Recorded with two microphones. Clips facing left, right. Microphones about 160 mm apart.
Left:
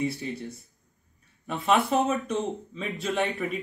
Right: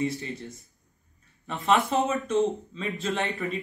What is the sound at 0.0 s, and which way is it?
Speech, 5° left (ahead or behind).